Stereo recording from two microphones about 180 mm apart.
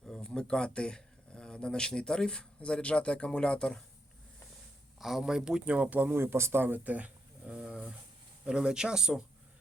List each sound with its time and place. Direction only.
0.0 s speech: centre (ahead or behind)
4.9 s speech: centre (ahead or behind)